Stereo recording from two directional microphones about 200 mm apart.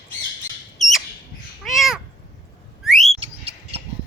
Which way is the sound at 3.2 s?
30° right (ahead or behind).